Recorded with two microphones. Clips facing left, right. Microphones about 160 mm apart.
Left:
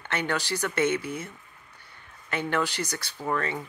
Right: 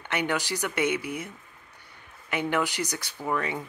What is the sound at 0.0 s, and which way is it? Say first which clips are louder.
Speech: right 1 dB; 15° right (ahead or behind).